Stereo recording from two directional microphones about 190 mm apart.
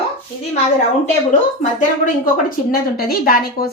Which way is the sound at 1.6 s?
40° left (ahead or behind).